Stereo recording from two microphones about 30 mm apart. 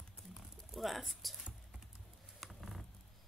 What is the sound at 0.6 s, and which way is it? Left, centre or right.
Speech, centre.